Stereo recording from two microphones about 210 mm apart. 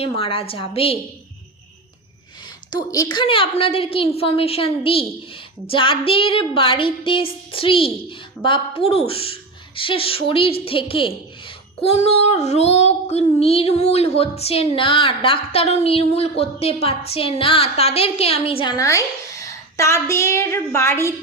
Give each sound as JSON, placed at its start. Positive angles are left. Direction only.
{"t": 0.0, "sound": "a woman's voice", "side_deg": 25}
{"t": 2.6, "sound": "a woman's voice", "side_deg": 20}